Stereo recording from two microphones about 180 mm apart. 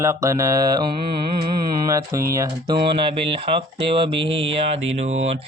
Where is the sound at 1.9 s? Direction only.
20° right (ahead or behind); by 5.4 s 35° right (ahead or behind).